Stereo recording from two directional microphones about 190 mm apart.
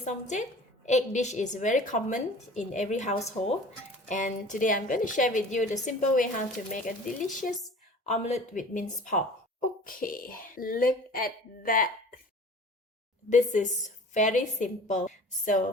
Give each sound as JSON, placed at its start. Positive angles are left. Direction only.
{"t": 0.0, "sound": "a woman's voice", "side_deg": 40}
{"t": 13.3, "sound": "a woman's voice", "side_deg": 40}